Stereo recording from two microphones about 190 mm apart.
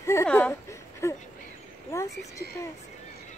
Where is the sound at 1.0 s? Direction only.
15° left (ahead or behind).